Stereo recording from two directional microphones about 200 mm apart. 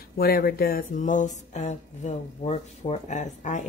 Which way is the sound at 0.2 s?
50° left (ahead or behind).